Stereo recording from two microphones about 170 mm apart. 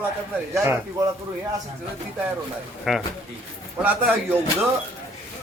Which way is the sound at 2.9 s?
Centre (ahead or behind).